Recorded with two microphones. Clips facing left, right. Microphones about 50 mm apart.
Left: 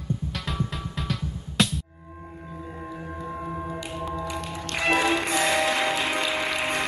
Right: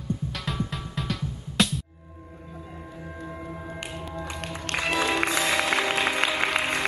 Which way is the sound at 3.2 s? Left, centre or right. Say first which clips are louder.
Left 4 dB; left.